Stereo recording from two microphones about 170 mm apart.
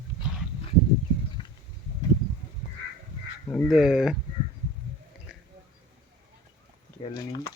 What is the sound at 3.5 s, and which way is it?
Speech, 5° right (ahead or behind).